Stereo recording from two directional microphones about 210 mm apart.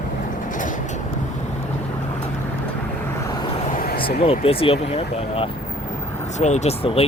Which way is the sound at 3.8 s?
45° left (ahead or behind).